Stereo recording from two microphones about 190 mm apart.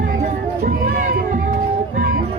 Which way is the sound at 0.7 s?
45° right (ahead or behind).